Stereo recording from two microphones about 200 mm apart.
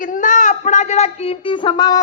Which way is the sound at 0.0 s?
40° left (ahead or behind).